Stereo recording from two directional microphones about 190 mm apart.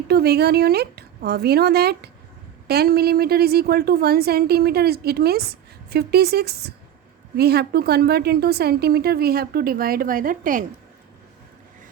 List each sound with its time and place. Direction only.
0.1 s a woman's voice: 55° right (ahead or behind)